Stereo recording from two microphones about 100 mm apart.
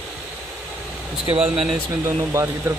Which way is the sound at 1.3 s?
65° right (ahead or behind).